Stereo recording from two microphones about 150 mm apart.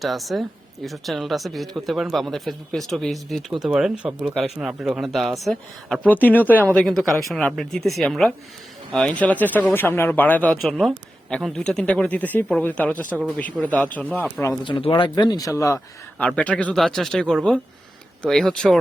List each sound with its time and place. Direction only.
0.0 s speech: centre (ahead or behind)
14.6 s speech: 35° left (ahead or behind)
16.1 s speech: 10° left (ahead or behind)